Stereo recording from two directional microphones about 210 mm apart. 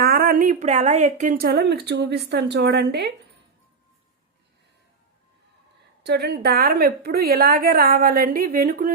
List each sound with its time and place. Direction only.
0.0 s speech: 45° right (ahead or behind)
6.0 s speech: 50° right (ahead or behind)